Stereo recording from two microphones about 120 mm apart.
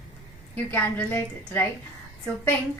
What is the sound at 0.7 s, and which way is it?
Speech, 15° left (ahead or behind).